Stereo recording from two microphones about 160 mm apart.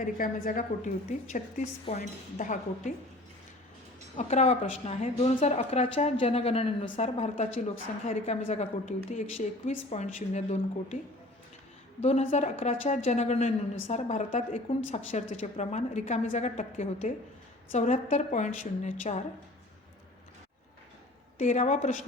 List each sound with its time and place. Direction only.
0.0 s a woman's voice: 55° left (ahead or behind)
4.2 s a woman's voice: 45° left (ahead or behind)
12.0 s a woman's voice: 40° left (ahead or behind)
21.3 s a woman's voice: 50° left (ahead or behind)